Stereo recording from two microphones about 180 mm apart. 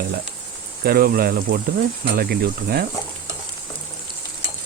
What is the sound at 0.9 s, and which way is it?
Speech, 55° right (ahead or behind).